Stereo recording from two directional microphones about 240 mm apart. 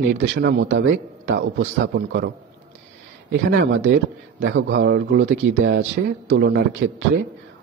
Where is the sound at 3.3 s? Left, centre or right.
Right.